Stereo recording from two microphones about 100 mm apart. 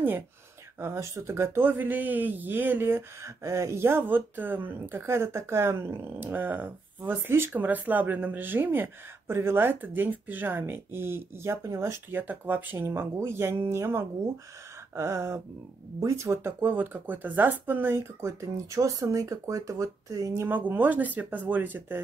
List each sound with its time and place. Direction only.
0.7 s speech: 25° right (ahead or behind)
20.4 s speech: 20° right (ahead or behind)